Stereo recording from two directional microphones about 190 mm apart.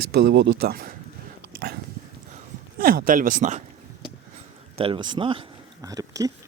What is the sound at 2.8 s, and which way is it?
Speech, 50° right (ahead or behind).